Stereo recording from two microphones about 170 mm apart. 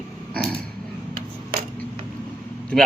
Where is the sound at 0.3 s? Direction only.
10° left (ahead or behind).